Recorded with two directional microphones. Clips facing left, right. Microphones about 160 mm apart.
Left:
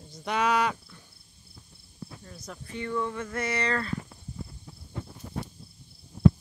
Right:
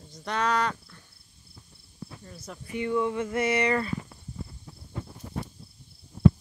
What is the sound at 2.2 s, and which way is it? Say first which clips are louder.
Speech: right 1 dB; 5° right (ahead or behind).